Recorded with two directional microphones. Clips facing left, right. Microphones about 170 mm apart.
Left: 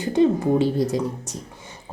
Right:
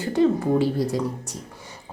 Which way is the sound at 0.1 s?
20° left (ahead or behind).